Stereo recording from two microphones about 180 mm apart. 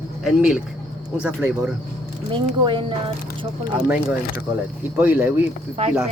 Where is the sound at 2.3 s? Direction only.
25° right (ahead or behind).